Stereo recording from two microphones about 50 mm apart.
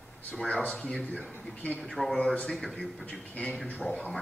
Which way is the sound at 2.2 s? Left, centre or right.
Left.